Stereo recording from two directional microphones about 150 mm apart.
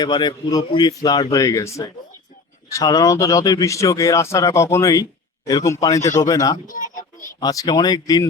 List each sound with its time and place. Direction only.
0.0 s speech: 30° left (ahead or behind)
6.0 s speech: 55° left (ahead or behind)
6.2 s speech: 25° left (ahead or behind)
6.7 s a child's voice: 60° left (ahead or behind)
7.3 s speech: 25° left (ahead or behind)